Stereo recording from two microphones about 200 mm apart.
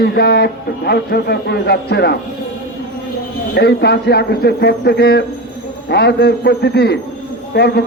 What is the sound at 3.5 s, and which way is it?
A man's voice, 55° left (ahead or behind).